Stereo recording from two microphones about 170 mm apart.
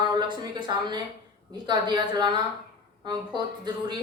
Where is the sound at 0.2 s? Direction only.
25° right (ahead or behind).